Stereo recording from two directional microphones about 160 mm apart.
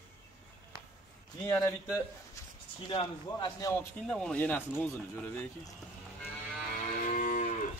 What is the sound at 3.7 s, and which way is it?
Speech, 15° left (ahead or behind).